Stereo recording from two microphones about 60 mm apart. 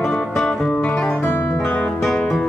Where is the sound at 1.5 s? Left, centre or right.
Centre.